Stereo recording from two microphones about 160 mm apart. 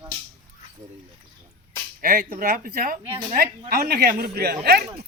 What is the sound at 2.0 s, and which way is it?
Speech, 60° right (ahead or behind).